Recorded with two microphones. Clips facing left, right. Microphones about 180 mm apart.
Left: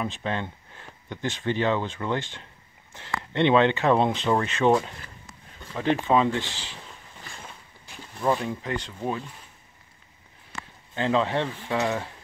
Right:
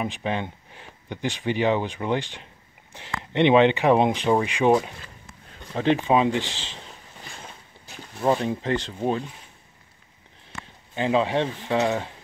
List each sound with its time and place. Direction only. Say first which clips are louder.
0.0 s speech: right 2 dB; 15° right (ahead or behind)
8.2 s speech: right 3 dB; 25° right (ahead or behind)
11.0 s speech: right 2 dB; 15° right (ahead or behind)